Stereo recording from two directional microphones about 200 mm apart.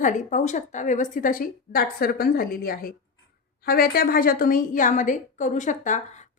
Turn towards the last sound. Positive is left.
turn(degrees=40)  # may be behind; listen again after turning